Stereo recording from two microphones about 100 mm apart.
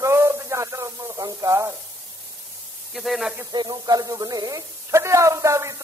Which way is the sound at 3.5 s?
45° right (ahead or behind).